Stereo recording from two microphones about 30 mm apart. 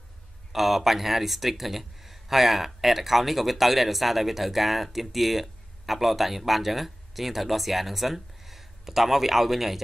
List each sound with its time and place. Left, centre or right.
0.5 s speech: centre